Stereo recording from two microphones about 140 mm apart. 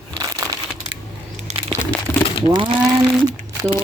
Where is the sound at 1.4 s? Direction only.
50° right (ahead or behind).